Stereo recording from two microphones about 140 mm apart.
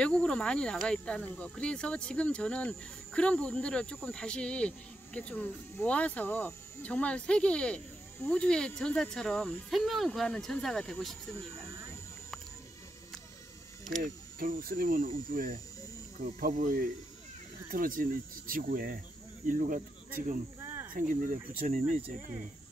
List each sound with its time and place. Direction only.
0.0 s speech: 5° left (ahead or behind)
14.0 s speech: 85° right; by 22.0 s 65° right (ahead or behind)